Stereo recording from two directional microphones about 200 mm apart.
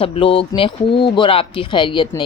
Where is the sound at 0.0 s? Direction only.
30° left (ahead or behind).